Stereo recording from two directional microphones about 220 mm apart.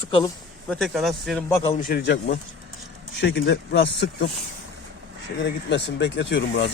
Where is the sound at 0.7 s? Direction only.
Centre (ahead or behind).